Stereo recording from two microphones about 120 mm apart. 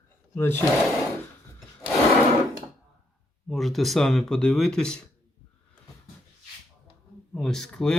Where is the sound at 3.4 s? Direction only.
Centre (ahead or behind).